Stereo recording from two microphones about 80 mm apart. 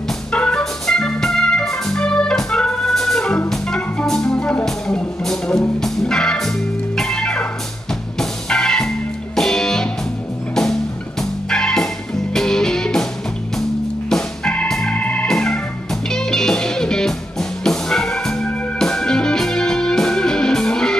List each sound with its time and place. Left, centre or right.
0.3 s music: centre
15.2 s organ: centre
16.1 s music: centre